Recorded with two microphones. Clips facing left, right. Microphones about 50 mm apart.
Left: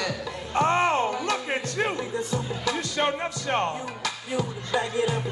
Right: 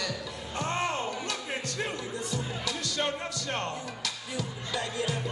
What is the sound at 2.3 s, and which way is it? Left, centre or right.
Music, left.